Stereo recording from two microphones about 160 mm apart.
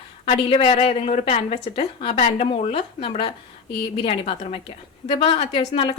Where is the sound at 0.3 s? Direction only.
40° left (ahead or behind).